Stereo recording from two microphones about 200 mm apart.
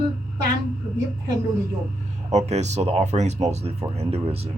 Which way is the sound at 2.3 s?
35° right (ahead or behind).